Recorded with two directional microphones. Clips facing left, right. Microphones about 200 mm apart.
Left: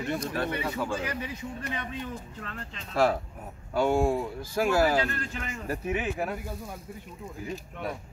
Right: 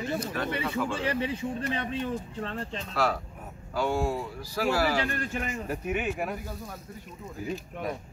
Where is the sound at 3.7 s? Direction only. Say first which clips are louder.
Left 4 dB; 25° left (ahead or behind).